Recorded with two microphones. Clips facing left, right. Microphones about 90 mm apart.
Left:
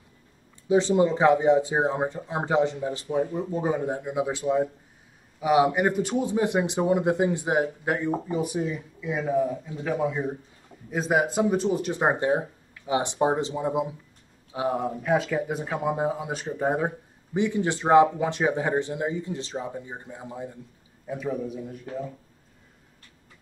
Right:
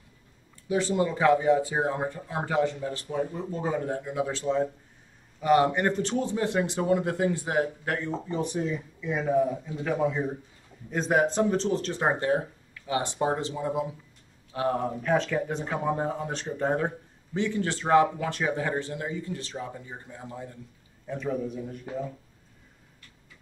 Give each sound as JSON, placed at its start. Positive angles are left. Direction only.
{"t": 0.7, "sound": "speech", "side_deg": 20}
{"t": 21.1, "sound": "a man's voice", "side_deg": 5}